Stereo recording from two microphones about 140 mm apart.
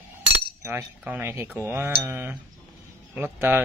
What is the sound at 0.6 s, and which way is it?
Speech, 15° right (ahead or behind).